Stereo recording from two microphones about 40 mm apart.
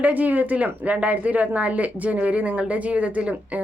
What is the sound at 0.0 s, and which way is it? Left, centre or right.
Speech, right.